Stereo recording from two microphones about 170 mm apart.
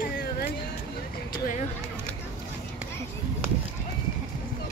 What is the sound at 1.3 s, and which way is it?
Speech, 55° left (ahead or behind).